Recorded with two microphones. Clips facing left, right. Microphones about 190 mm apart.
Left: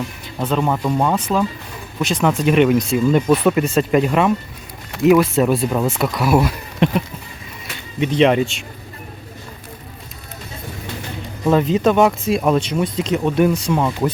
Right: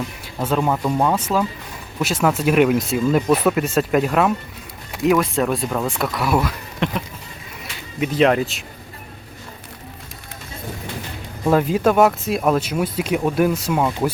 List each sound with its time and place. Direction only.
0.3 s speech: 5° right (ahead or behind)
6.4 s speech: 25° left (ahead or behind)
8.0 s speech: centre (ahead or behind)
11.4 s speech: 10° right (ahead or behind)